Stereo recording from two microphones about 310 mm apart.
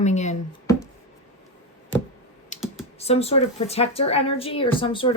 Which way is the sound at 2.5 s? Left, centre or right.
Left.